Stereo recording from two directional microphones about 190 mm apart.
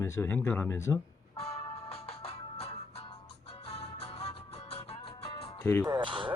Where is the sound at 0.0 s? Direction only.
15° left (ahead or behind).